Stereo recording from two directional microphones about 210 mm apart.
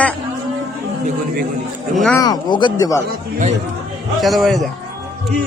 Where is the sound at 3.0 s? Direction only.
35° right (ahead or behind).